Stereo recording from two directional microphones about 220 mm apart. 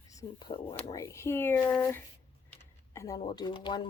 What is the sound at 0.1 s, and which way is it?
Speech, 15° left (ahead or behind).